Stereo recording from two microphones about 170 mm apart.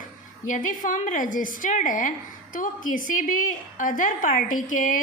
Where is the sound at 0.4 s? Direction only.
50° left (ahead or behind).